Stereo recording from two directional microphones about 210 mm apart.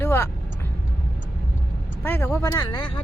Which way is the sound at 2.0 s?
10° left (ahead or behind).